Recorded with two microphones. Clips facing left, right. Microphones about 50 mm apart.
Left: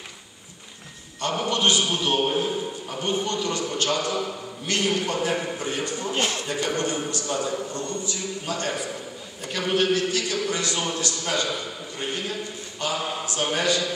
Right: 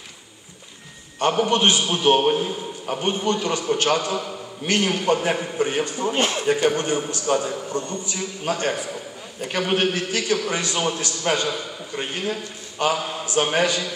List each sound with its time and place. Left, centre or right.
1.3 s a man's voice: right